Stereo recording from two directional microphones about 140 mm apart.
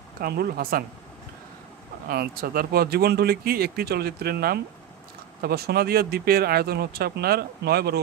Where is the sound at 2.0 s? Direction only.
90° right.